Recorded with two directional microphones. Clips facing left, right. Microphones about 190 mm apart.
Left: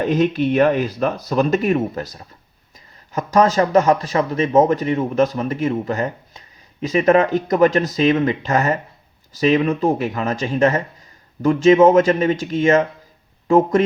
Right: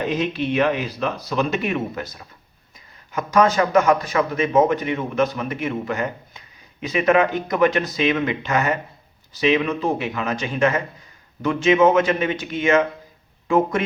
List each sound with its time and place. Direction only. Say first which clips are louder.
0.1 s speech: left 5 dB; 45° left (ahead or behind)
2.7 s a sound: left 2 dB; 40° left (ahead or behind)
3.3 s speech: left 2 dB; 40° left (ahead or behind)